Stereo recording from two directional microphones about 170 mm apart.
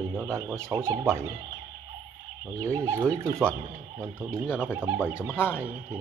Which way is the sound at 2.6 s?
15° right (ahead or behind).